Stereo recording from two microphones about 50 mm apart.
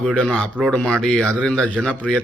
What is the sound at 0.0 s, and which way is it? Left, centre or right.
A man's voice, left.